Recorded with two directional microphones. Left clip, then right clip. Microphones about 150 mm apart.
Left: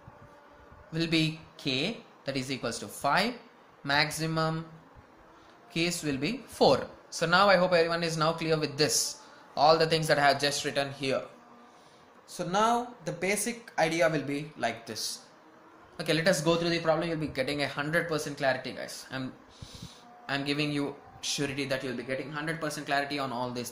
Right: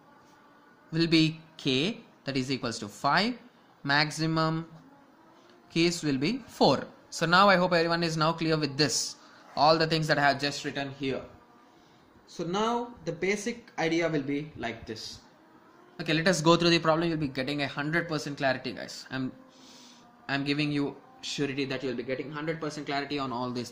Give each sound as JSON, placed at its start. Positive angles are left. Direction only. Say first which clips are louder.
{"t": 0.9, "sound": "speech", "louder": "right 4 dB", "side_deg": -40}
{"t": 5.7, "sound": "speech", "louder": "right 3 dB", "side_deg": -40}
{"t": 10.7, "sound": "speech", "louder": "left 3 dB", "side_deg": 0}
{"t": 12.3, "sound": "speech", "louder": "left 3 dB", "side_deg": -5}
{"t": 16.0, "sound": "speech", "louder": "even", "side_deg": -25}
{"t": 16.3, "sound": "speech", "louder": "right 5 dB", "side_deg": -50}